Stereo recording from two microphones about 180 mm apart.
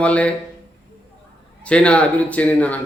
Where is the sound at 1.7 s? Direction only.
5° left (ahead or behind).